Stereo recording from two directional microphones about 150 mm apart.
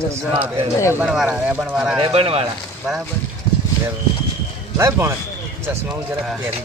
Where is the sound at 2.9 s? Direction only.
5° right (ahead or behind).